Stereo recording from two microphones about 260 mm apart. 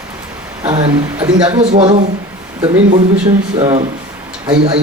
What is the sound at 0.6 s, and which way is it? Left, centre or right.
Speech, centre.